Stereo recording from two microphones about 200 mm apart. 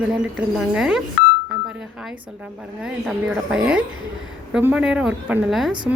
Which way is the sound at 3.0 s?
5° right (ahead or behind).